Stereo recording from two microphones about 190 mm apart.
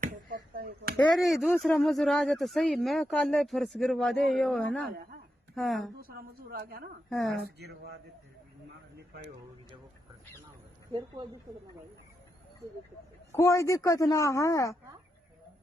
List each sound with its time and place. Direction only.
0.0 s a sound: 45° right (ahead or behind)
0.9 s speech: 5° left (ahead or behind)
6.0 s a woman's voice: 50° right (ahead or behind)
7.1 s speech: centre (ahead or behind)
7.3 s speech: 55° right (ahead or behind)
13.3 s speech: 15° left (ahead or behind)